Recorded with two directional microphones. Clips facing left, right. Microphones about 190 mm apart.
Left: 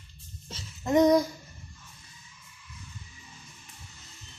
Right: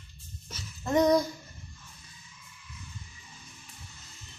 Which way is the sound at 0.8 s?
15° left (ahead or behind).